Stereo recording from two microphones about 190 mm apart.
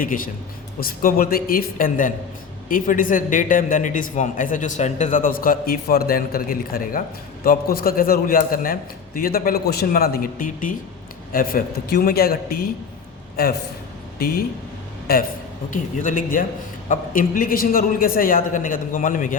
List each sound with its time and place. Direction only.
0.0 s a man's voice: 45° left (ahead or behind)